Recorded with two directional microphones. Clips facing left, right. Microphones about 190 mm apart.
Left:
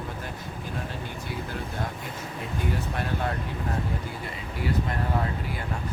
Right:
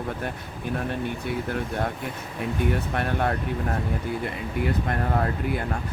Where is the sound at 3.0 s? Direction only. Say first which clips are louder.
Right 4 dB; 60° right (ahead or behind).